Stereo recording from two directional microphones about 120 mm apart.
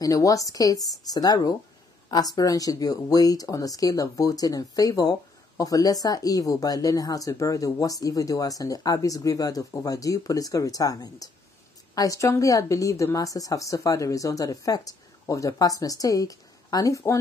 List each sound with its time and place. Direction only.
0.0 s a woman's voice: 30° left (ahead or behind)